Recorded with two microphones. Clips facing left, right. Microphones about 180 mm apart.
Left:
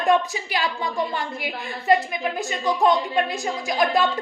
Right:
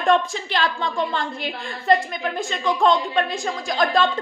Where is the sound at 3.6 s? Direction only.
5° left (ahead or behind).